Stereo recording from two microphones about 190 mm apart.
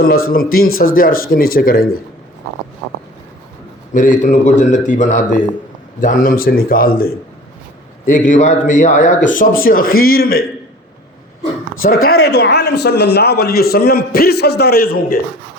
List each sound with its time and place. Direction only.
0.3 s a man's voice: 50° left (ahead or behind)
3.9 s a man's voice: 45° left (ahead or behind)
12.0 s a man's voice: 55° left (ahead or behind)